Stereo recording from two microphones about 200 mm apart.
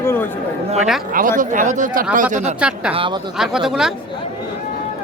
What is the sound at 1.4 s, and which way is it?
Speech, 40° right (ahead or behind).